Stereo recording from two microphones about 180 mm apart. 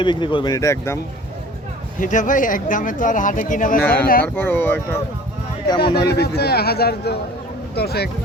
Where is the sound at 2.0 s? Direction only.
45° left (ahead or behind).